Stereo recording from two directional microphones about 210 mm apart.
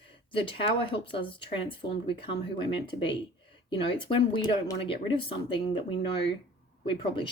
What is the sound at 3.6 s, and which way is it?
Speech, 25° left (ahead or behind).